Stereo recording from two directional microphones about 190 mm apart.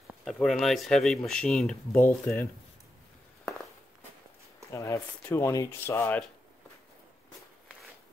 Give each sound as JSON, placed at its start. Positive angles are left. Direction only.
{"t": 0.2, "sound": "speech", "side_deg": 0}
{"t": 4.7, "sound": "speech", "side_deg": 15}